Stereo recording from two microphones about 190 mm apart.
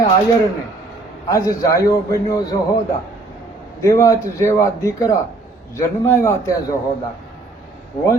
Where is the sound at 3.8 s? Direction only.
15° left (ahead or behind).